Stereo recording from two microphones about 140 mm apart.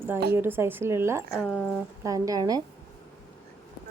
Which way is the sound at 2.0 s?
25° right (ahead or behind).